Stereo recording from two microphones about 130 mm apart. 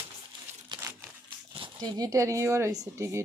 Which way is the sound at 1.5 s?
40° right (ahead or behind).